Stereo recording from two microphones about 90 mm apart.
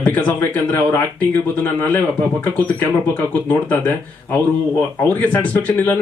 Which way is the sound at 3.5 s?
20° left (ahead or behind).